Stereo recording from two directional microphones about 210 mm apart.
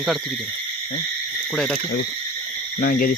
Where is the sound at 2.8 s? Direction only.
45° left (ahead or behind).